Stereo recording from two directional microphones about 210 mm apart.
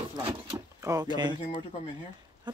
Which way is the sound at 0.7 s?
15° right (ahead or behind).